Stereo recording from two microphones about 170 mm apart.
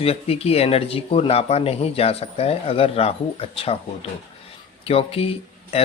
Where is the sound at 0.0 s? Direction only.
35° left (ahead or behind).